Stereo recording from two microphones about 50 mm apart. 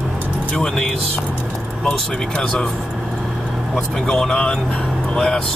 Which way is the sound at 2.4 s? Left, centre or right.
Centre.